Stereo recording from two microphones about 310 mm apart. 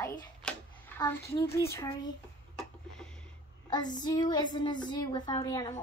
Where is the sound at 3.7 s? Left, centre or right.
Centre.